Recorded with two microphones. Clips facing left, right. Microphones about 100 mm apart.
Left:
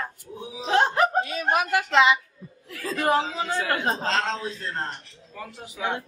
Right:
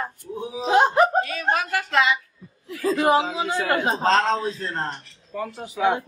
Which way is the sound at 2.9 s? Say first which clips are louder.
Right 2 dB; 15° right (ahead or behind).